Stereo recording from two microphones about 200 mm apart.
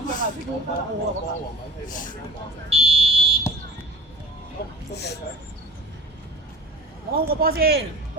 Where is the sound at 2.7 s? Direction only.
30° right (ahead or behind).